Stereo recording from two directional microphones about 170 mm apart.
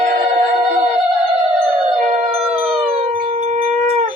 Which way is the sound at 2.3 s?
35° right (ahead or behind).